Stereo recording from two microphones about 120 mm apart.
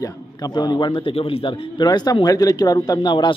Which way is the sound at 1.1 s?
50° left (ahead or behind).